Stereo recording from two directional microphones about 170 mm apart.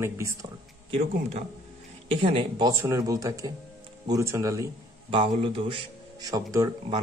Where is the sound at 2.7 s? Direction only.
20° right (ahead or behind).